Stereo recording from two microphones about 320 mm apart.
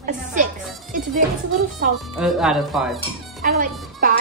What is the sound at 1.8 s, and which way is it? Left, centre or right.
Speech, right.